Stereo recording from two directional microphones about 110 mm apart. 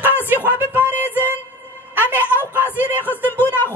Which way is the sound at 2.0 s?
20° left (ahead or behind).